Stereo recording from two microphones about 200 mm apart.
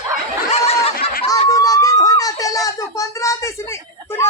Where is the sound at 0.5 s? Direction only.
30° left (ahead or behind).